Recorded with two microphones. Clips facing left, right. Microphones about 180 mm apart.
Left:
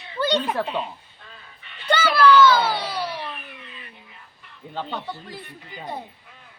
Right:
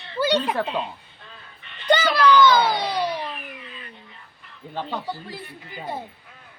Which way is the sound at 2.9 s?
15° right (ahead or behind).